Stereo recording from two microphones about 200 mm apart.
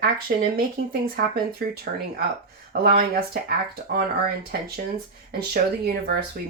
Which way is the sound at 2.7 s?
50° right (ahead or behind).